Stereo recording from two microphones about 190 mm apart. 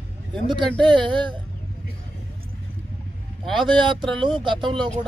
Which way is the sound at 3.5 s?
25° right (ahead or behind).